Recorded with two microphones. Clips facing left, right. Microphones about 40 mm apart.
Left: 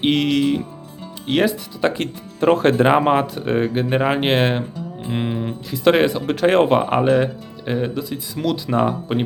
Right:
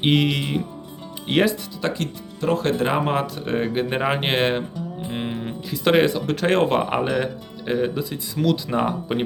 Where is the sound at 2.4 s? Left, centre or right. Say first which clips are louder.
Left 6 dB; left.